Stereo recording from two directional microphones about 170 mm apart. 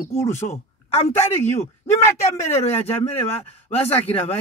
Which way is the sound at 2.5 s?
35° left (ahead or behind).